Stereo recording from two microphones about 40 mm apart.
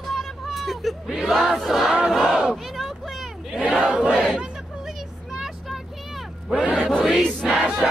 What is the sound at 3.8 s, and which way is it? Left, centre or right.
Battle cry, right.